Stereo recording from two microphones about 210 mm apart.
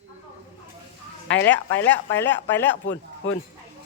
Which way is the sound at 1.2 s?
60° left (ahead or behind).